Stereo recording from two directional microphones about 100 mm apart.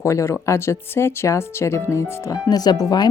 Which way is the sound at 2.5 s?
40° left (ahead or behind).